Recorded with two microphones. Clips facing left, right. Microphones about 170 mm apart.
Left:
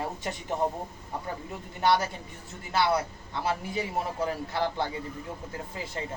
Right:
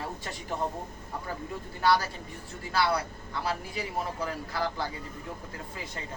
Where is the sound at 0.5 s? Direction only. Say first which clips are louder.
Left 4 dB; 20° left (ahead or behind).